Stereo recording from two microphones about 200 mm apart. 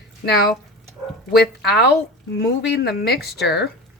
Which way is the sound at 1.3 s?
55° left (ahead or behind).